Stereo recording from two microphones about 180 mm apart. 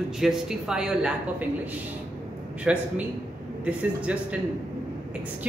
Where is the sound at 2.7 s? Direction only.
5° right (ahead or behind).